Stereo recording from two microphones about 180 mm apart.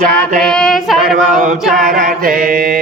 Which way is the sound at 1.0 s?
55° right (ahead or behind).